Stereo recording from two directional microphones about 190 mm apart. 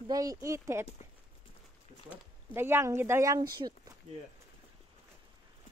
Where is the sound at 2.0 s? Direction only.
10° right (ahead or behind).